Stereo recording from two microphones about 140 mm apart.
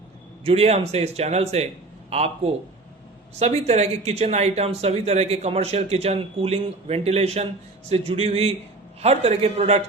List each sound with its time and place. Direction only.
0.4 s speech: 45° right (ahead or behind)